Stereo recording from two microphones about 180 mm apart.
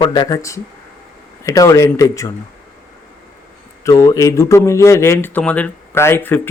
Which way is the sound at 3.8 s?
20° left (ahead or behind).